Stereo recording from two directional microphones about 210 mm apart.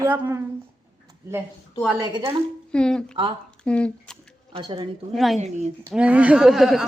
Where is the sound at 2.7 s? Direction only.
5° left (ahead or behind).